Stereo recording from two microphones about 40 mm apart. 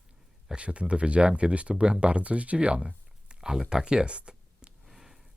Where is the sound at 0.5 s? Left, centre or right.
Right.